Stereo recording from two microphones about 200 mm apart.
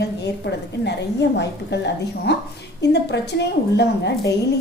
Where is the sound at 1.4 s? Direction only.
60° left (ahead or behind).